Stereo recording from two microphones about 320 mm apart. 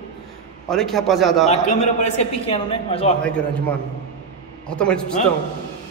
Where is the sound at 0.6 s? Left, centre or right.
Centre.